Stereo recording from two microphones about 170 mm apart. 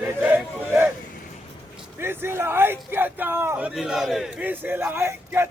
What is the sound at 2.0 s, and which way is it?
A man's voice, 15° right (ahead or behind).